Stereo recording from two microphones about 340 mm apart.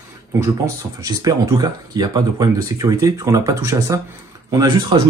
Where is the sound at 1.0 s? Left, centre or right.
Centre.